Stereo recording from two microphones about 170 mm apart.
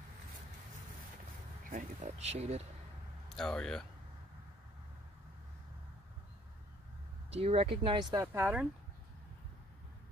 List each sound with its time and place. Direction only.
1.7 s speech: 45° right (ahead or behind)
3.3 s speech: 5° left (ahead or behind)
7.2 s speech: 35° right (ahead or behind)
8.3 s speech: 10° right (ahead or behind)